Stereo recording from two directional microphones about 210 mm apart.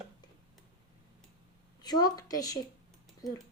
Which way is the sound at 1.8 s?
20° left (ahead or behind).